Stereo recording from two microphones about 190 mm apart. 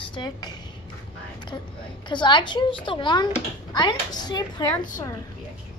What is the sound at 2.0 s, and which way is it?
A woman's voice, 25° left (ahead or behind).